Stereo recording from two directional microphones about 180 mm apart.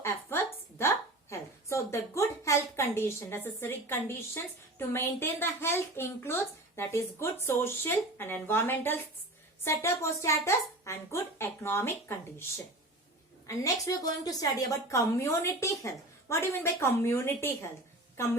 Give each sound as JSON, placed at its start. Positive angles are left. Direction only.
{"t": 0.0, "sound": "a sound", "side_deg": 15}
{"t": 4.4, "sound": "a woman's voice", "side_deg": 10}
{"t": 13.5, "sound": "a woman's voice", "side_deg": 20}